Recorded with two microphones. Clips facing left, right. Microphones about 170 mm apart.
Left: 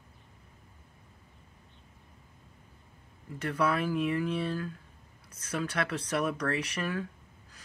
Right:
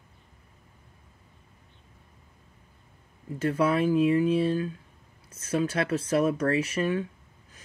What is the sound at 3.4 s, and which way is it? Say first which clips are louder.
Speech: right 5 dB; 25° right (ahead or behind).